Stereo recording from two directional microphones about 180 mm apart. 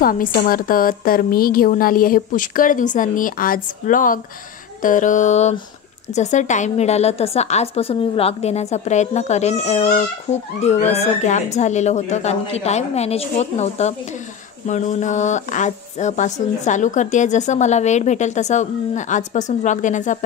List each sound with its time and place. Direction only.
0.0 s a woman's voice: 50° left (ahead or behind)